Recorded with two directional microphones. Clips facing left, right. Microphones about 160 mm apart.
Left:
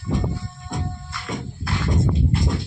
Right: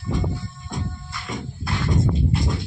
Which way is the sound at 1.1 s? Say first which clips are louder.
Left 2 dB; centre (ahead or behind).